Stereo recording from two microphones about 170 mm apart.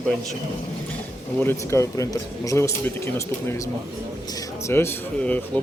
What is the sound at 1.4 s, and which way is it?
Speech, 15° left (ahead or behind).